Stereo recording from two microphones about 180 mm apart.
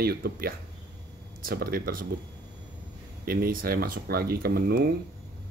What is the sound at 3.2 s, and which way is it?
Speech, 55° right (ahead or behind).